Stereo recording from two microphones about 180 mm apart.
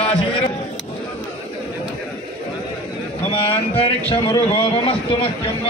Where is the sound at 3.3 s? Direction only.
30° left (ahead or behind).